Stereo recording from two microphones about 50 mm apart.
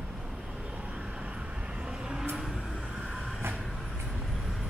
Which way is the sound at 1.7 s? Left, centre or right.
Centre.